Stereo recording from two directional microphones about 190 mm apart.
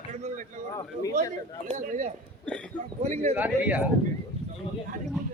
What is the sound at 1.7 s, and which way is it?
Speech, 40° right (ahead or behind).